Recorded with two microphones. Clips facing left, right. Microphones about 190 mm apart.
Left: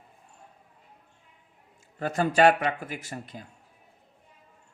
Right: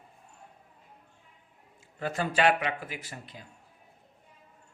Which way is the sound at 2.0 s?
45° left (ahead or behind).